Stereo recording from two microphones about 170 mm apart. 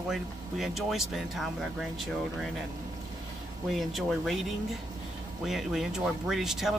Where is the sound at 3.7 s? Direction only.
Centre (ahead or behind).